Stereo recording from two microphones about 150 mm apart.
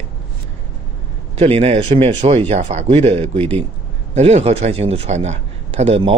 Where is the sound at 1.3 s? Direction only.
45° right (ahead or behind).